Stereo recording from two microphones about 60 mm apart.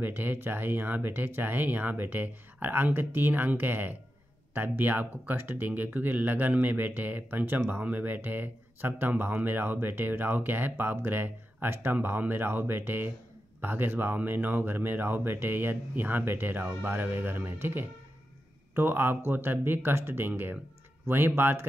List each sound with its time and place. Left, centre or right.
0.0 s speech: right